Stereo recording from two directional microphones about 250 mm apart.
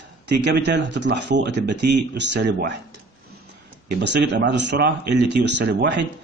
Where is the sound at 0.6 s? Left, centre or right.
Right.